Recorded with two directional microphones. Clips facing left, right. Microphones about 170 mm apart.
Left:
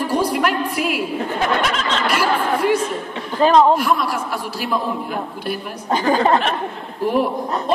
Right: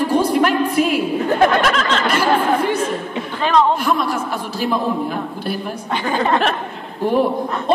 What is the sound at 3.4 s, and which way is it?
Speech, 40° left (ahead or behind).